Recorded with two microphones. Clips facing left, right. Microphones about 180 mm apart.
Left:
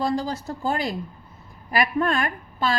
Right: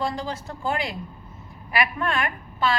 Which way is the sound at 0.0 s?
35° left (ahead or behind).